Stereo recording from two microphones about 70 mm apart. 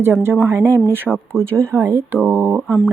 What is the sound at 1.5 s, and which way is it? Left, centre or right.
Speech, right.